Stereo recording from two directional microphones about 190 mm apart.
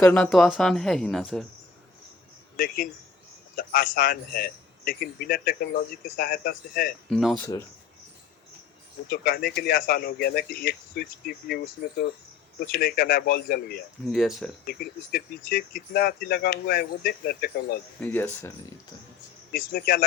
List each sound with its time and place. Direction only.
0.0 s speech: 5° left (ahead or behind)
2.6 s a man's voice: 50° left (ahead or behind)
7.1 s speech: centre (ahead or behind)
7.3 s speech: 15° left (ahead or behind)
9.0 s a man's voice: 55° left (ahead or behind)
14.1 s speech: centre (ahead or behind)
14.7 s speech: 55° left (ahead or behind)
18.0 s speech: 10° left (ahead or behind)
19.5 s a man's voice: 50° left (ahead or behind)